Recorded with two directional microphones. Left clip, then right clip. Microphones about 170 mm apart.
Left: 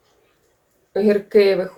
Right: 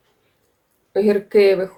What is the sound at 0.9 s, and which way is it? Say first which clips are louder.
Speech: even; 30° right (ahead or behind).